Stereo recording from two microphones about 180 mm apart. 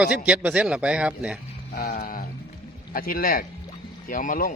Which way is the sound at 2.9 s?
55° left (ahead or behind).